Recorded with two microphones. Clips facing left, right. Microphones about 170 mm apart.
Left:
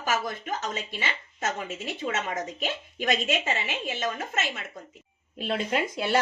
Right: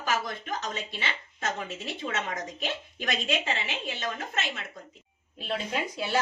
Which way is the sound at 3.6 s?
45° left (ahead or behind).